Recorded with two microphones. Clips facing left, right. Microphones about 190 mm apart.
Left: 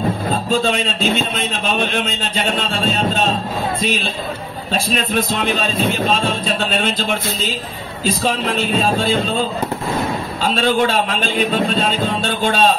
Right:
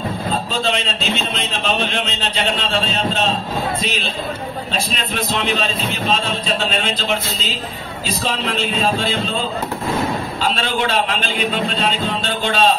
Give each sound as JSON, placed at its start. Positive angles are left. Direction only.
{"t": 0.5, "sound": "a man's voice", "side_deg": 50}
{"t": 4.9, "sound": "a man's voice", "side_deg": 45}
{"t": 8.5, "sound": "a man's voice", "side_deg": 45}
{"t": 10.5, "sound": "a man's voice", "side_deg": 45}